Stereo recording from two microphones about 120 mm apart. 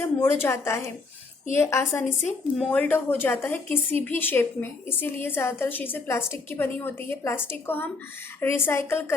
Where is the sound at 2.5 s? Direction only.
5° left (ahead or behind).